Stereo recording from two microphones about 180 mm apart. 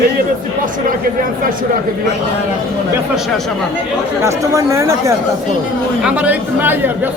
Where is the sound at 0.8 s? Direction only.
50° right (ahead or behind).